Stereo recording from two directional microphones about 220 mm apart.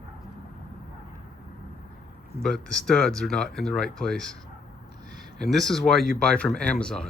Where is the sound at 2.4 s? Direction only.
Centre (ahead or behind).